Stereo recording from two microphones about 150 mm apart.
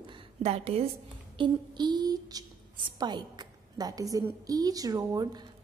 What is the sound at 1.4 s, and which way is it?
A woman's voice, 30° right (ahead or behind).